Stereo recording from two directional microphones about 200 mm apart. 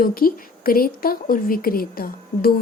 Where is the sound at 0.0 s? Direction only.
45° left (ahead or behind).